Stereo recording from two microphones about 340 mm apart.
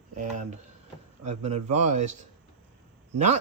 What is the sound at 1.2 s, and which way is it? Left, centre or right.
Speech, centre.